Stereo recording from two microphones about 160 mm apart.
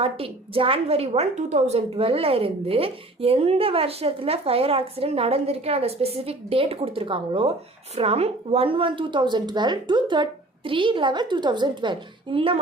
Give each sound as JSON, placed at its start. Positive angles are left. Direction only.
{"t": 0.0, "sound": "a woman's voice", "side_deg": -35}